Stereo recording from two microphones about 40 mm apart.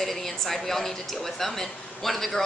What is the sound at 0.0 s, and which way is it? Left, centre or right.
A woman's voice, centre.